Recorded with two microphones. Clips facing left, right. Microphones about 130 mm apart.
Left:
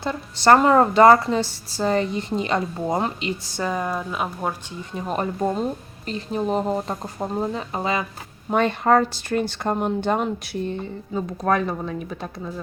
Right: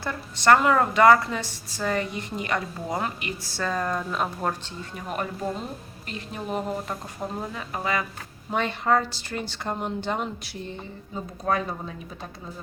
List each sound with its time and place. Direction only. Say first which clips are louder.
0.0 s a woman's voice: left 4 dB; 25° left (ahead or behind); by 4.5 s 5° left (ahead or behind)
4.8 s a woman's voice: left 5 dB; 25° left (ahead or behind)
8.4 s speech: left 5 dB; 50° left (ahead or behind)
11.1 s speech: left 5 dB; 65° left (ahead or behind)